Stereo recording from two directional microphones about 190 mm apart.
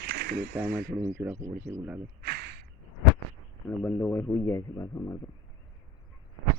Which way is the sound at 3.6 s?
5° left (ahead or behind).